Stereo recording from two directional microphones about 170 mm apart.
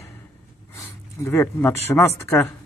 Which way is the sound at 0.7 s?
15° left (ahead or behind).